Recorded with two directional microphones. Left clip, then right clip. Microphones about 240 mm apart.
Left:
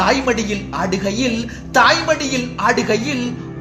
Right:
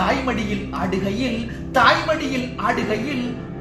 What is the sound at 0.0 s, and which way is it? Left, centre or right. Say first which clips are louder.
A woman's voice: left 5 dB; left.